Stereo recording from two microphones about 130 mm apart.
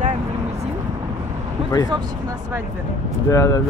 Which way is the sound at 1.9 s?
30° right (ahead or behind).